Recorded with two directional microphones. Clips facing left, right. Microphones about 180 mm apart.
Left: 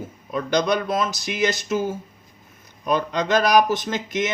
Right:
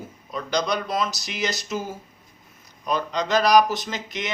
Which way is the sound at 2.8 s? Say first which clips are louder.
Left 3 dB; 55° left (ahead or behind).